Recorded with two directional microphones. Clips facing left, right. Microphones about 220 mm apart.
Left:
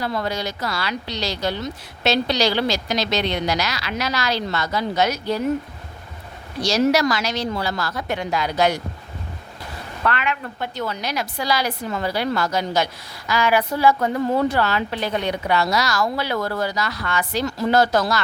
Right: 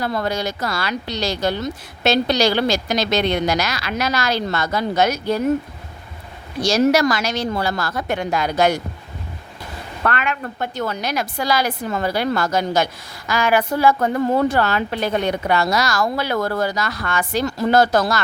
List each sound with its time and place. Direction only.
0.0 s a woman's voice: 50° right (ahead or behind)
6.6 s a woman's voice: 50° right (ahead or behind)
10.0 s a woman's voice: 50° right (ahead or behind)